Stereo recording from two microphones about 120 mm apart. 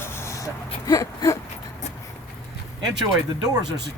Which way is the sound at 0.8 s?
30° left (ahead or behind).